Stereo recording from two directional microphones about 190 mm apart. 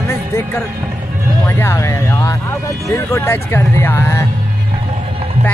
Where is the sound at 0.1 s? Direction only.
10° left (ahead or behind).